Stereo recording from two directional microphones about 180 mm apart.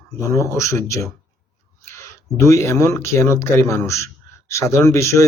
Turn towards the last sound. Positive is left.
turn(degrees=15)  # may be behind; listen again after turning